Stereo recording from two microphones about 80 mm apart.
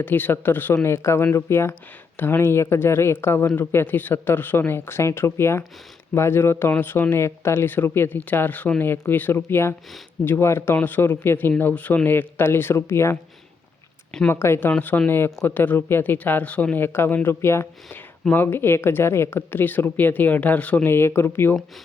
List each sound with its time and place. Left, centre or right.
0.0 s speech: left
14.3 s speech: left
14.7 s speech: left
20.9 s speech: left